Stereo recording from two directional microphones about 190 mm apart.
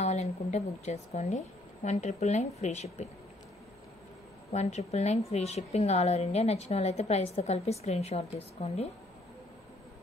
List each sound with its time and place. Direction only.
0.0 s a woman's voice: 35° left (ahead or behind)
4.5 s a woman's voice: 35° left (ahead or behind)